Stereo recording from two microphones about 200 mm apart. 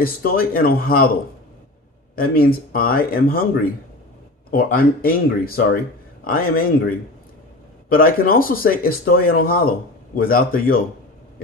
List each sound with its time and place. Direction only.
0.0 s speech: 45° left (ahead or behind)
2.1 s speech: 45° left (ahead or behind)